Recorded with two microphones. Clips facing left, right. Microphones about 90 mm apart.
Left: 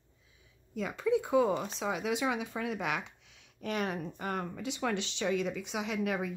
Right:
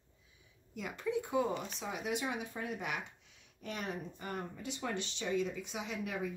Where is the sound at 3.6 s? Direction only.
75° left (ahead or behind).